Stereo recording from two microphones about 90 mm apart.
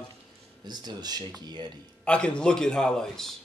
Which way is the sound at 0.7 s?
50° right (ahead or behind).